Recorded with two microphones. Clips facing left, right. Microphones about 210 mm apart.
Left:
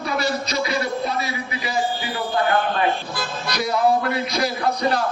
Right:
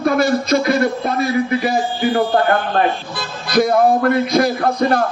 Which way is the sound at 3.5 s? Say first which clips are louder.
Right 7 dB; 50° right (ahead or behind).